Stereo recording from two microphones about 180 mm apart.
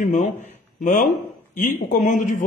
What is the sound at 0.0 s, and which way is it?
Speech, 45° left (ahead or behind).